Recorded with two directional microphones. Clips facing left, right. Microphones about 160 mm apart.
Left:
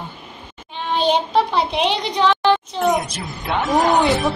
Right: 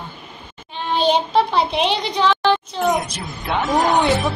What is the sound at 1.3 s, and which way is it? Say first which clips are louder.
A woman's voice: right 1 dB; 15° left (ahead or behind).